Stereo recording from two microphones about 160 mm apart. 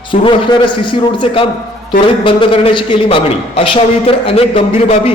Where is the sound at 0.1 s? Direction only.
30° left (ahead or behind).